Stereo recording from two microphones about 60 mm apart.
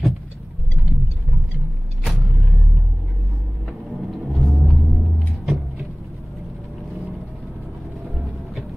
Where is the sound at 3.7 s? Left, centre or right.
Centre.